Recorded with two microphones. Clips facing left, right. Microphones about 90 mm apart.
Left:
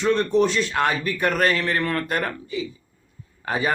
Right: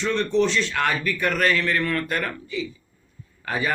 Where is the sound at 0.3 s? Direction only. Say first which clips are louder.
Right 1 dB; 45° left (ahead or behind).